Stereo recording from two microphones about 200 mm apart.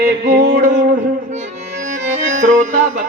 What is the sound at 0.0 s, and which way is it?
Music, 55° right (ahead or behind).